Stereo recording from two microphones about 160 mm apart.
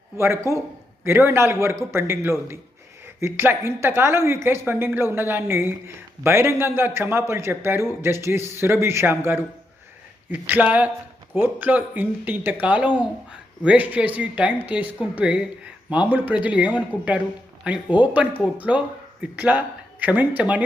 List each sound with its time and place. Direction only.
0.2 s a man's voice: 15° right (ahead or behind)